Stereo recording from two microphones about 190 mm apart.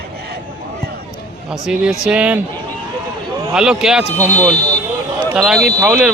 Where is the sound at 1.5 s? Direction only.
5° right (ahead or behind).